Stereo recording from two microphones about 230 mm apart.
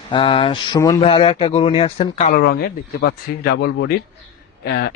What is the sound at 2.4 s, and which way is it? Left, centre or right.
A man's voice, left.